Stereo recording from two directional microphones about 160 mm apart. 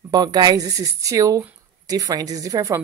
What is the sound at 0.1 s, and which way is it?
A woman's voice, 25° right (ahead or behind).